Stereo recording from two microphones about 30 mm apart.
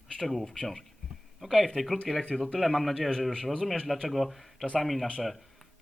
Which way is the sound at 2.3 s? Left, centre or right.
Centre.